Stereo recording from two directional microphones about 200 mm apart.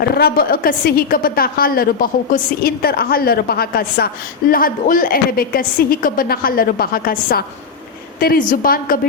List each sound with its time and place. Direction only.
0.2 s a woman's voice: 50° left (ahead or behind)